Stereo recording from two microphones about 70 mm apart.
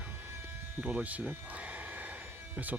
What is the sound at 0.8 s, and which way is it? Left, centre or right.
Speech, right.